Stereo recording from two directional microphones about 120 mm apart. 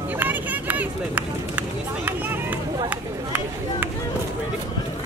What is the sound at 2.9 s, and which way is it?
Speech, 15° right (ahead or behind).